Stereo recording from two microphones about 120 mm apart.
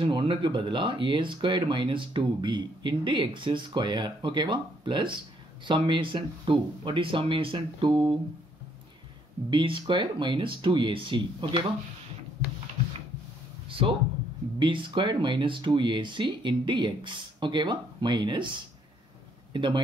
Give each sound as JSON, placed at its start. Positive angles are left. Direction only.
{"t": 0.0, "sound": "speech", "side_deg": -45}
{"t": 9.5, "sound": "speech", "side_deg": -45}
{"t": 13.7, "sound": "a sound", "side_deg": -50}
{"t": 14.6, "sound": "speech", "side_deg": -45}
{"t": 19.5, "sound": "speech", "side_deg": -40}